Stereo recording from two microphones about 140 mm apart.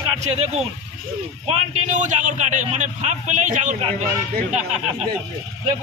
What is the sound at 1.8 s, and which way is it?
A man's voice, 65° right (ahead or behind).